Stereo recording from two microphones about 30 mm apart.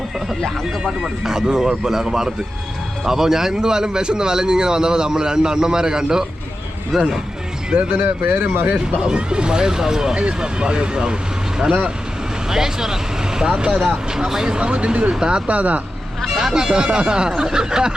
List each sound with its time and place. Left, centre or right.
1.0 s a man's voice: centre
6.9 s speech: centre
7.9 s speech: right
9.0 s a man's voice: right
10.2 s a man's voice: right
12.5 s speech: centre
14.1 s a man's voice: centre; by 15.1 s right
15.2 s a man's voice: right
15.4 s speech: right
16.3 s speech: centre
16.6 s a man's voice: right